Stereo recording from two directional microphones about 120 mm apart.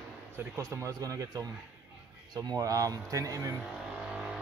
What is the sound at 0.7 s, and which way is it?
Speech, 25° right (ahead or behind).